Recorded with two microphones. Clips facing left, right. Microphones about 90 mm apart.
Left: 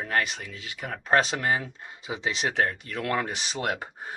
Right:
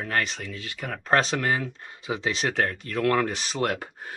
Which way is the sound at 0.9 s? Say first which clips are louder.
Even; 25° left (ahead or behind).